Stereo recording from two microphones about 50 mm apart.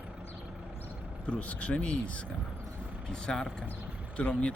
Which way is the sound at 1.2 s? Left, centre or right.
Left.